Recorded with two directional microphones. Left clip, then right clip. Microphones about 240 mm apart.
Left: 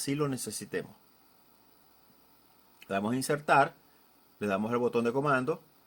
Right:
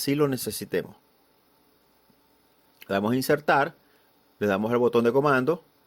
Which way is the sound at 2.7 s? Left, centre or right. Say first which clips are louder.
Right 6 dB; right.